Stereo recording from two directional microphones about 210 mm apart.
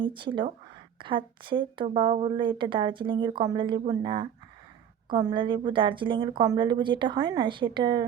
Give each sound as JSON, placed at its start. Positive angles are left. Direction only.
{"t": 0.0, "sound": "speech", "side_deg": -25}